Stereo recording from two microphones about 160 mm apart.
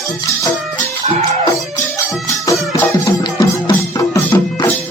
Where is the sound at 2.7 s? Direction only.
20° left (ahead or behind).